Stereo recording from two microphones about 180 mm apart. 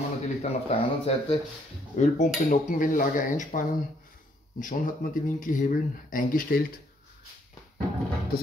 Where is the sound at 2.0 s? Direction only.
45° left (ahead or behind).